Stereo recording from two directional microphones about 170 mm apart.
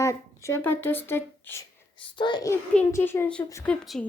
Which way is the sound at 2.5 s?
15° left (ahead or behind).